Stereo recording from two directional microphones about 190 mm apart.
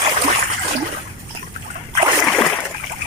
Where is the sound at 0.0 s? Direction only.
35° right (ahead or behind).